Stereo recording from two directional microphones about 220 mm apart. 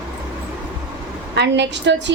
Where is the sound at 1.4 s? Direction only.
50° right (ahead or behind).